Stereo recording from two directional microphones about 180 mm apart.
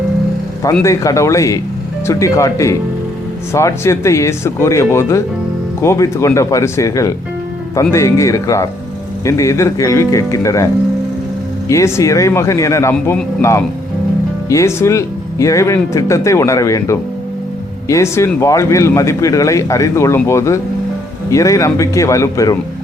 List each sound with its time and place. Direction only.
0.6 s speech: 15° left (ahead or behind)
11.7 s speech: 15° left (ahead or behind)